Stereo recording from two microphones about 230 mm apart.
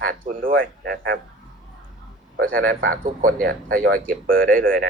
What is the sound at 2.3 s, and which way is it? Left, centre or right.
Speech, right.